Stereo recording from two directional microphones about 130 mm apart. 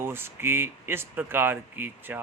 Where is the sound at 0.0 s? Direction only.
15° right (ahead or behind).